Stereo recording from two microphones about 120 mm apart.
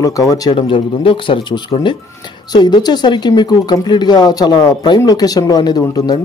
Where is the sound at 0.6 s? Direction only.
45° left (ahead or behind).